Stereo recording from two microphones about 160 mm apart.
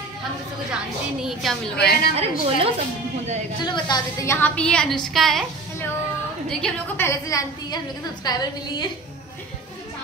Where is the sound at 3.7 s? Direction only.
25° left (ahead or behind).